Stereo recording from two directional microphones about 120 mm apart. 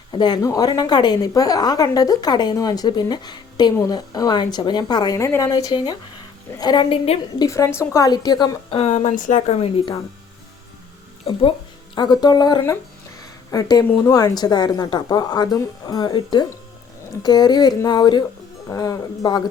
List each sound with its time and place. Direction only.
0.1 s a woman's voice: 35° left (ahead or behind)
7.3 s a woman's voice: 25° left (ahead or behind)
8.7 s speech: 55° left (ahead or behind)
11.3 s speech: 55° left (ahead or behind)
11.9 s a woman's voice: 35° left (ahead or behind)
13.1 s a sound: 30° left (ahead or behind)
14.0 s a woman's voice: 30° left (ahead or behind)